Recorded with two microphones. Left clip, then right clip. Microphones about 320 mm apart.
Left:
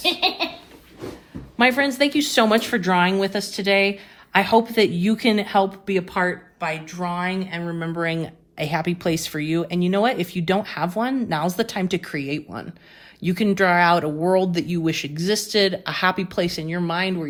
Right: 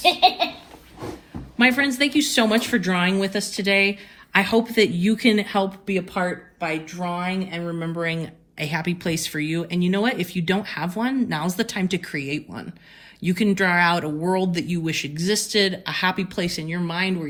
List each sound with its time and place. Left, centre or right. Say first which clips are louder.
1.5 s speech: left 1 dB; left
7.6 s speech: left 1 dB; left